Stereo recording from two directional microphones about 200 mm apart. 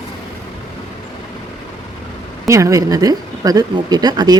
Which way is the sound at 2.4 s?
15° right (ahead or behind).